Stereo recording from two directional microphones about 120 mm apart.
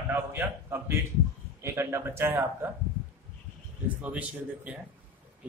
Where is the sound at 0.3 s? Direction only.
20° right (ahead or behind).